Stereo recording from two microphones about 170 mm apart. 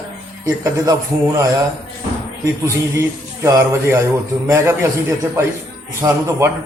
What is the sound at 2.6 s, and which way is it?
A man's voice, 15° right (ahead or behind).